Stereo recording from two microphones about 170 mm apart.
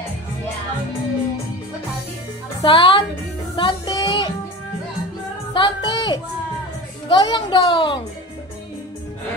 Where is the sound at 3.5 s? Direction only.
25° left (ahead or behind).